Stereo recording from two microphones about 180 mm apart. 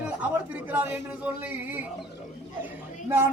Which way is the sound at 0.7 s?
10° right (ahead or behind).